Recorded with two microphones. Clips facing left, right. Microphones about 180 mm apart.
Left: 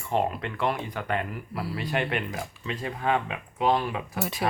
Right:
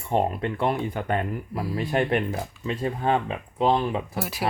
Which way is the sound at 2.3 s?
30° right (ahead or behind).